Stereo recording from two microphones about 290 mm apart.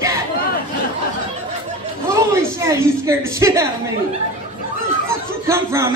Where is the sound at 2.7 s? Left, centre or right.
Centre.